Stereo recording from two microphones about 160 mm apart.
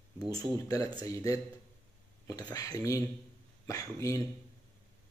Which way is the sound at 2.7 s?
20° left (ahead or behind).